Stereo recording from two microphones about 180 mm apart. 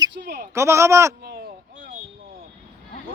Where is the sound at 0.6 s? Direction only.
15° right (ahead or behind).